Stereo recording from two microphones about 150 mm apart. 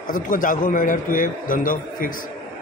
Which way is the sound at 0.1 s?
65° left (ahead or behind).